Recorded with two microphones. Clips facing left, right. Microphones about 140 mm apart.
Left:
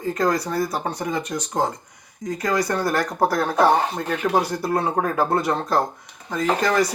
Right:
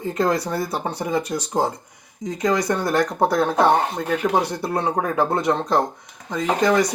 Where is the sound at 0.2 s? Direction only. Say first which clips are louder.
Right 1 dB; centre (ahead or behind).